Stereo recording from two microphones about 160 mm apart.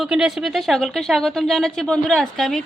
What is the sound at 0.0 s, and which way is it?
Speech, 5° right (ahead or behind).